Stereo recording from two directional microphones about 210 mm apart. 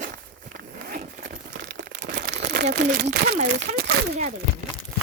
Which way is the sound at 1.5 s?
45° right (ahead or behind).